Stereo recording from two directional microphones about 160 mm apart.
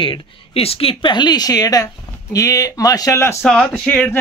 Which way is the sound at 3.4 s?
5° left (ahead or behind).